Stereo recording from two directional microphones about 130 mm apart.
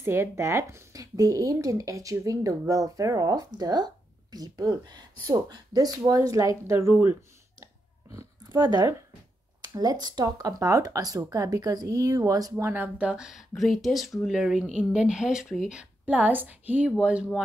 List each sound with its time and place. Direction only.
0.0 s speech: 20° right (ahead or behind)
7.6 s a sound: 25° right (ahead or behind)
9.6 s a woman's voice: 30° right (ahead or behind); by 17.3 s 5° right (ahead or behind)